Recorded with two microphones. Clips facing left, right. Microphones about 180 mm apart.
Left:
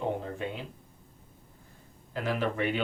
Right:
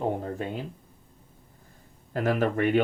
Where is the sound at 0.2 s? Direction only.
45° right (ahead or behind).